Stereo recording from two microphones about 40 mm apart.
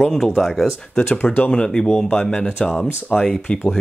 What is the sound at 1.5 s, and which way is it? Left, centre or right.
Speech, centre.